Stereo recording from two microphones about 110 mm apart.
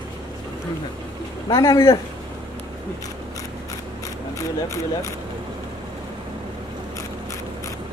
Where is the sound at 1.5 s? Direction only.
25° left (ahead or behind).